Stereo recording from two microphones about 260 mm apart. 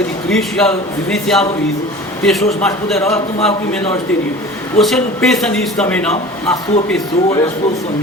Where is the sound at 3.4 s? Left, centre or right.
Left.